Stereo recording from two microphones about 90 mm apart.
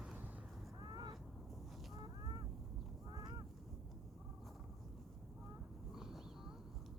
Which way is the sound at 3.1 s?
50° right (ahead or behind).